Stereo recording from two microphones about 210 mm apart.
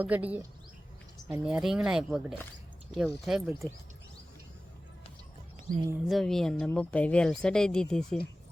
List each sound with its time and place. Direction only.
0.0 s speech: 5° right (ahead or behind)
5.7 s speech: 40° right (ahead or behind)
6.1 s speech: centre (ahead or behind)